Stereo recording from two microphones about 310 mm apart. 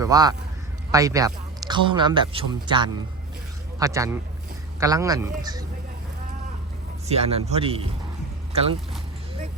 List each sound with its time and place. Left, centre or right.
0.0 s a man's voice: centre
7.1 s speech: centre